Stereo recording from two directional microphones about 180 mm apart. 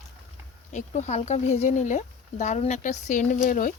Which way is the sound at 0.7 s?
40° left (ahead or behind).